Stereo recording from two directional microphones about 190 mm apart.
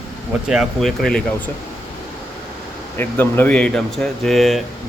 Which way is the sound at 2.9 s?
10° left (ahead or behind).